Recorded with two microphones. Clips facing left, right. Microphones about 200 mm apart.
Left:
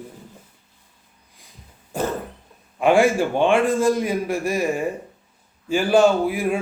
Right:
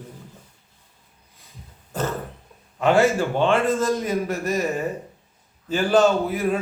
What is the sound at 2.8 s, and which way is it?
A man's voice, 10° left (ahead or behind).